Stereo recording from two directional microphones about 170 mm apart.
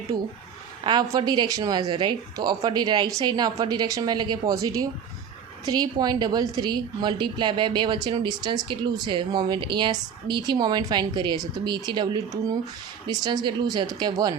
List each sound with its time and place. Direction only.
0.1 s a woman's voice: 25° right (ahead or behind)